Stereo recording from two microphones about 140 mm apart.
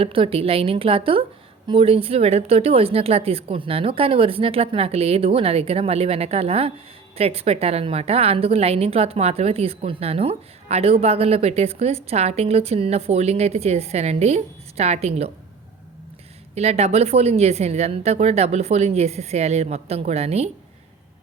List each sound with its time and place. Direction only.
0.0 s a woman's voice: 40° right (ahead or behind)
16.6 s a woman's voice: 50° right (ahead or behind)